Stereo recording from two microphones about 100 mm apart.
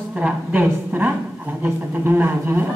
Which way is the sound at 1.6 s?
20° right (ahead or behind).